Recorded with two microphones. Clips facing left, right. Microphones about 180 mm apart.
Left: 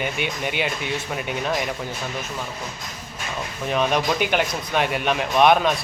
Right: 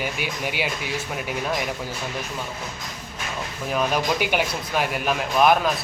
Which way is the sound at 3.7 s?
5° right (ahead or behind).